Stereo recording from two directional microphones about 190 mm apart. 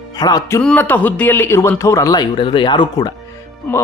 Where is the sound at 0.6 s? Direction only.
5° left (ahead or behind); by 3.1 s 20° left (ahead or behind).